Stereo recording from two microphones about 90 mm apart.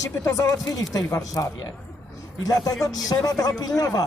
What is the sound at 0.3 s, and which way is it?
A man's voice, 40° left (ahead or behind).